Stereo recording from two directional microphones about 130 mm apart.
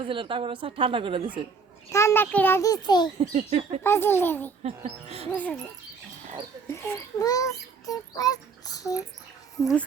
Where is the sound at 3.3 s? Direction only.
60° right (ahead or behind).